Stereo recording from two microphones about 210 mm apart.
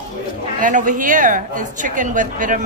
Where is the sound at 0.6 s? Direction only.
35° right (ahead or behind).